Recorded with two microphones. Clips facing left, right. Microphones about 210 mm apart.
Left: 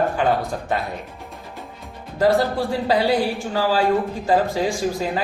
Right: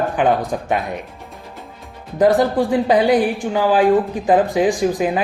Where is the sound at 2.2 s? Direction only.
15° right (ahead or behind).